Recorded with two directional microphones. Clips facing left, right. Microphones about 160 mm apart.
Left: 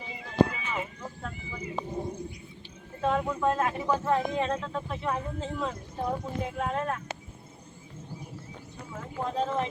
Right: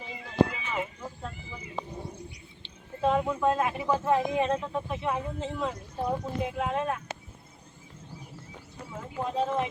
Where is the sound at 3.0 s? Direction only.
5° right (ahead or behind).